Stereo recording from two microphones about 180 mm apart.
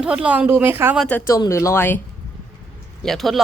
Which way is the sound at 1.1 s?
15° left (ahead or behind).